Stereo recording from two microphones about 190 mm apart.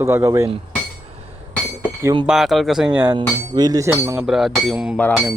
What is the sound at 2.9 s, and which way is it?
Speech, 15° right (ahead or behind).